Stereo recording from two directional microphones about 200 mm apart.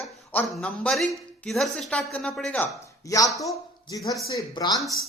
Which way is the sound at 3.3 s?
15° left (ahead or behind).